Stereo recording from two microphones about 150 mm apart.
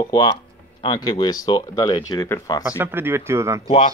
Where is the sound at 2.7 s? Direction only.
15° right (ahead or behind).